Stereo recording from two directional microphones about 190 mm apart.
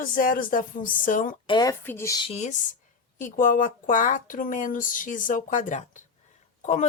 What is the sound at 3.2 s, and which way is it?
A woman's voice, 45° left (ahead or behind).